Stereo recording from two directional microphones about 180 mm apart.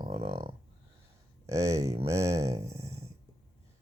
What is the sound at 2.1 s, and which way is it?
Speech, 35° right (ahead or behind).